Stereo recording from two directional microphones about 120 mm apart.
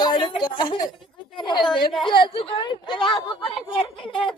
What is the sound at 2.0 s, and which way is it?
Speech, 45° left (ahead or behind).